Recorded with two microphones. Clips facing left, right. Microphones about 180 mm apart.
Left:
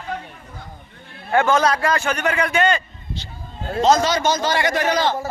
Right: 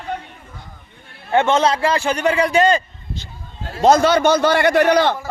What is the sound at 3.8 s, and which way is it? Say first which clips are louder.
A man's voice: right 4 dB; 60° right (ahead or behind).